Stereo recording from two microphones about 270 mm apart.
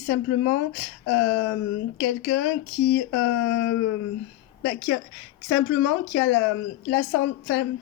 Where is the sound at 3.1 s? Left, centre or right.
Left.